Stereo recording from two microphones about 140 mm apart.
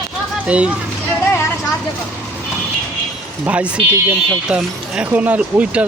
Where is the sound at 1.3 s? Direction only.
15° left (ahead or behind).